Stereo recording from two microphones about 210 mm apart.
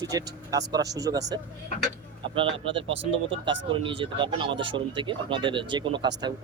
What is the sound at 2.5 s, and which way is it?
Speech, 25° right (ahead or behind).